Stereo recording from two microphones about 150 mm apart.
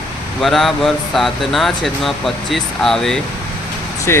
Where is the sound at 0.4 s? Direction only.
Centre (ahead or behind).